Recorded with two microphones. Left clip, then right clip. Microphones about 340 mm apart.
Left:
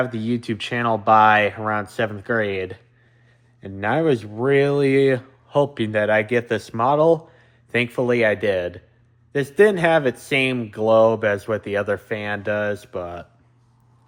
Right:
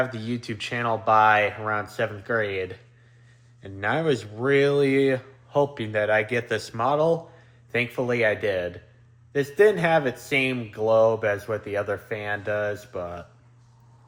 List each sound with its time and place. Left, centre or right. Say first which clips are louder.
0.0 s speech: left 4 dB; left